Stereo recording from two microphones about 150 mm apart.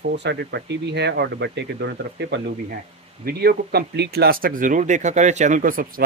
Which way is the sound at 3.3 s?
90° right.